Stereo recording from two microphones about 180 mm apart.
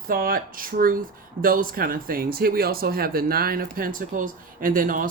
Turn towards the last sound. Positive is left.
turn(degrees=-50)  # may be behind; listen again after turning